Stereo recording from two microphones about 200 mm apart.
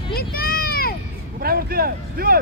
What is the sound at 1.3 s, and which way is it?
Speech, 50° right (ahead or behind).